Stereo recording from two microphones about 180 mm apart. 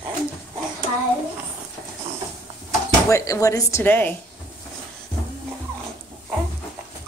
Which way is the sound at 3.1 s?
15° left (ahead or behind).